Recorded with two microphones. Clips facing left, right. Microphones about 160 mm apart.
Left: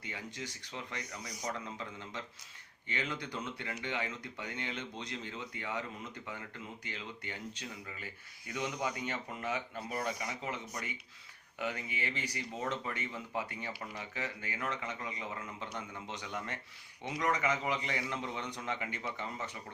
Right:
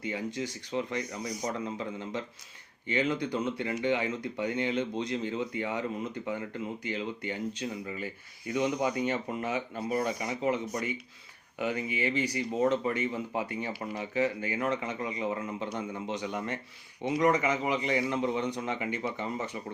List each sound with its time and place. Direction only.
0.0 s speech: 15° right (ahead or behind)